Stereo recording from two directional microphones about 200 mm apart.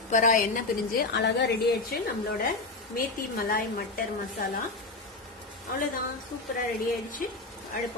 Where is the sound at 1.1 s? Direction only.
60° left (ahead or behind).